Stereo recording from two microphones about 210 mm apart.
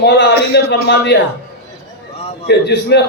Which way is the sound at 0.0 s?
55° left (ahead or behind).